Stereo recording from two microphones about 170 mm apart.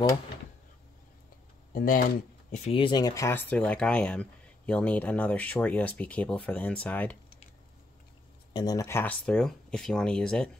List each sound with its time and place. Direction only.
1.7 s speech: 55° left (ahead or behind)
2.5 s speech: 35° left (ahead or behind); by 7.2 s 10° left (ahead or behind)
8.5 s speech: 20° left (ahead or behind); by 10.5 s 5° left (ahead or behind)